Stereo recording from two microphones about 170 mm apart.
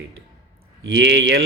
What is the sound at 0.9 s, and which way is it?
Speech, 90° right.